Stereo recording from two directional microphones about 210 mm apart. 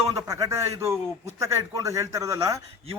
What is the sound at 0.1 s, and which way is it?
A man's voice, 15° right (ahead or behind).